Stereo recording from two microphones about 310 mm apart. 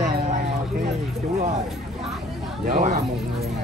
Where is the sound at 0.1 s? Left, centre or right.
Right.